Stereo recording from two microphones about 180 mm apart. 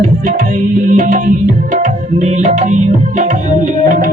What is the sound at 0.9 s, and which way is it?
Tabla, 45° right (ahead or behind).